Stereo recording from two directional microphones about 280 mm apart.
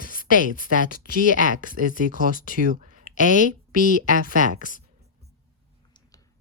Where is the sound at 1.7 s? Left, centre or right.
Right.